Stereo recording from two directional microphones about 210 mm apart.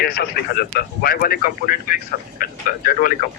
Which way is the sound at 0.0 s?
45° left (ahead or behind).